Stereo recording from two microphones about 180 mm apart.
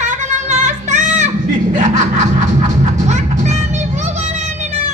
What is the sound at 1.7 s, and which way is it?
Snicker, 40° right (ahead or behind).